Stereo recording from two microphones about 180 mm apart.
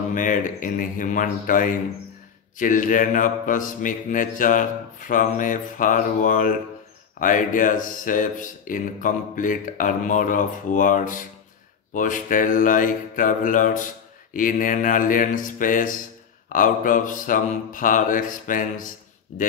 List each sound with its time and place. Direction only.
0.1 s mantra: 45° left (ahead or behind)